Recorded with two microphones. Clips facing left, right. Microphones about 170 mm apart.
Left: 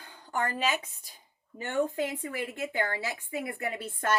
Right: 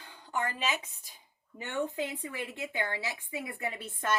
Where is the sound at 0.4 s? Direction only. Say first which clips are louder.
Left 7 dB; 45° left (ahead or behind).